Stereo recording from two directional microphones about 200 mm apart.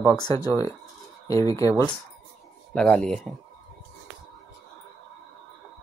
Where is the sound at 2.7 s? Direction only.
5° left (ahead or behind).